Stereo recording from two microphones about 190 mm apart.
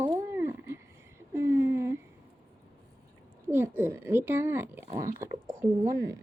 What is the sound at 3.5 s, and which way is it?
Speech, 10° right (ahead or behind).